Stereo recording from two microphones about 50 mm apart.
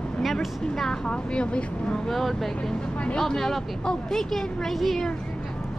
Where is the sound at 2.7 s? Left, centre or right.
Left.